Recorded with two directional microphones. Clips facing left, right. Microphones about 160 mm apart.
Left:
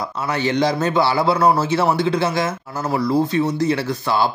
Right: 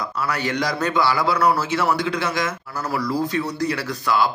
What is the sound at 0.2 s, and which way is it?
A man's voice, 25° left (ahead or behind).